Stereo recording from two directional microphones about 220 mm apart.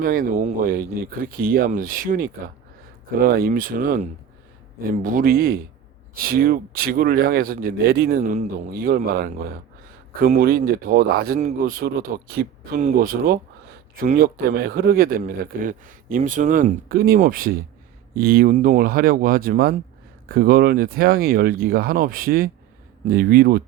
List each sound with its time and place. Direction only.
0.0 s a man's voice: 40° right (ahead or behind)
8.2 s a man's voice: 30° right (ahead or behind)